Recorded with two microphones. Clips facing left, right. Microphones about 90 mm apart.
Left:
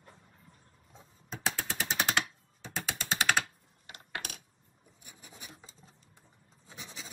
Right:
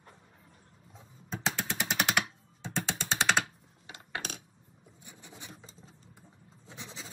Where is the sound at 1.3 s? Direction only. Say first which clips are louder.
Right 2 dB; 15° right (ahead or behind).